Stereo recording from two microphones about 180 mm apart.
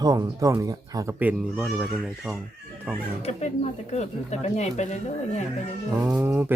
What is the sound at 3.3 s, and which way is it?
Speech, 35° left (ahead or behind).